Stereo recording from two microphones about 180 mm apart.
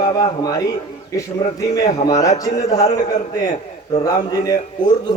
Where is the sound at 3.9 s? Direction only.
20° left (ahead or behind).